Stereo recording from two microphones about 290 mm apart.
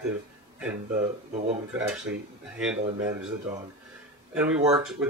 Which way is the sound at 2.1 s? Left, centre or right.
Right.